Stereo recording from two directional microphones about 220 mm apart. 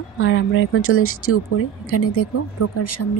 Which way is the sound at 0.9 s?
70° left (ahead or behind).